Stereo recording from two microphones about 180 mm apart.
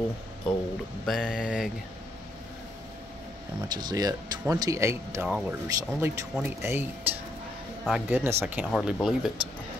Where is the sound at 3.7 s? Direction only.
25° right (ahead or behind); by 9.3 s centre (ahead or behind).